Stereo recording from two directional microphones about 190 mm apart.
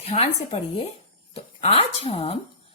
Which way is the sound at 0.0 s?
35° left (ahead or behind).